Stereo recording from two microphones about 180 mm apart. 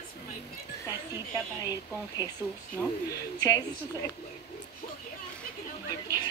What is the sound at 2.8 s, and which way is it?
Speech, 15° left (ahead or behind).